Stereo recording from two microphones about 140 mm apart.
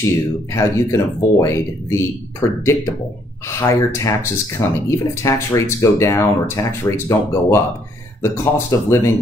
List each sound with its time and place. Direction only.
0.5 s speech: 20° left (ahead or behind)